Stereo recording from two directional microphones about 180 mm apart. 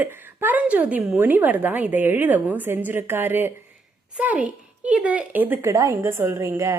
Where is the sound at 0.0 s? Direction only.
10° right (ahead or behind).